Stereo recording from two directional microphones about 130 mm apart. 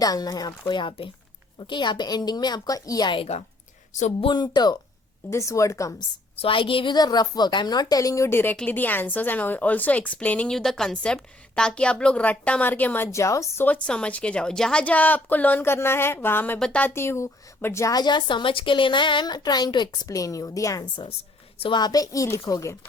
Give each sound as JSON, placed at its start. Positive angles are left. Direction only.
{"t": 0.0, "sound": "a woman's voice", "side_deg": 30}
{"t": 6.3, "sound": "a woman's voice", "side_deg": 45}
{"t": 20.9, "sound": "a woman's voice", "side_deg": 40}